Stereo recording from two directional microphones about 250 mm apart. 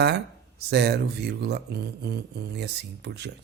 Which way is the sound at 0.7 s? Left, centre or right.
Right.